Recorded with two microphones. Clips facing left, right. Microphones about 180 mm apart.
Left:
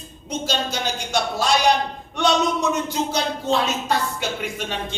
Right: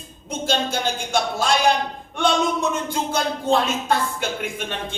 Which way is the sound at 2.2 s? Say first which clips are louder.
Even; 50° right (ahead or behind).